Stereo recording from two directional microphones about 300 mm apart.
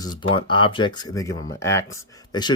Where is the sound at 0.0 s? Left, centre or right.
Centre.